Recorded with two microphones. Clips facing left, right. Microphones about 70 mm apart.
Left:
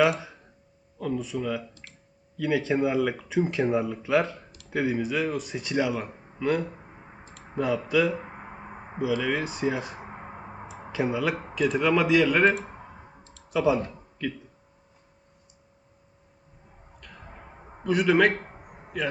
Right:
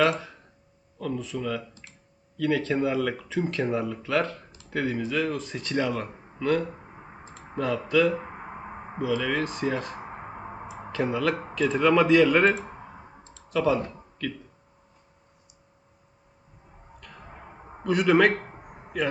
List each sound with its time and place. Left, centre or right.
0.0 s a sound: centre
0.9 s speech: centre
17.8 s speech: centre